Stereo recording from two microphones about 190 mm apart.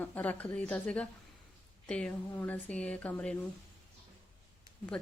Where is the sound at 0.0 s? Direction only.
10° left (ahead or behind).